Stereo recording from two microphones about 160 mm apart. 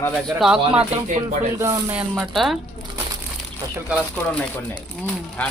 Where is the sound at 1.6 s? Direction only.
20° right (ahead or behind).